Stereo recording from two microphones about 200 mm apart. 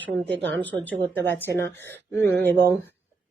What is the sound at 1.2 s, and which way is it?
A woman's voice, 10° left (ahead or behind).